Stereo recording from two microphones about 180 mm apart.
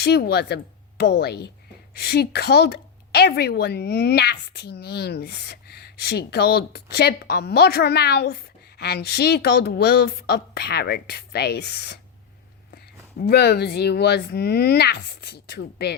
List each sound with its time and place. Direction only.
0.0 s a woman's voice: 65° left (ahead or behind)